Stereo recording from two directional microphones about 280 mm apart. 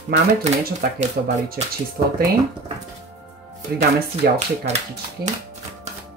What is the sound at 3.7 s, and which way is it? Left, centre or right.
Speech, right.